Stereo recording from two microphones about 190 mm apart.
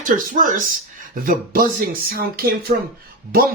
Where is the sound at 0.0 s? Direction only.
45° right (ahead or behind).